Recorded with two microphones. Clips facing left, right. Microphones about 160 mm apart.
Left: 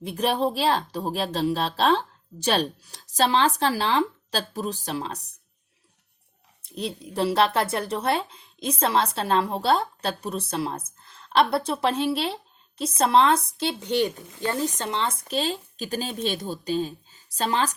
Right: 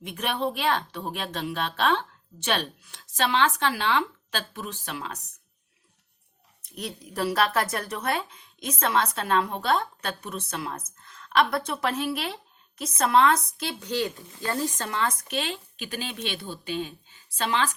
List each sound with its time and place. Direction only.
0.0 s a woman's voice: 35° left (ahead or behind)
6.6 s a woman's voice: 30° left (ahead or behind)